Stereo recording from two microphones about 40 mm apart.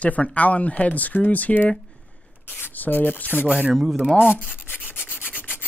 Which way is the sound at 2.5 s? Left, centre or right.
Left.